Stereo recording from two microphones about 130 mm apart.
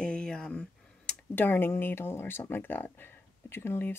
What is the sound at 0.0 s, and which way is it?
Speech, 5° left (ahead or behind).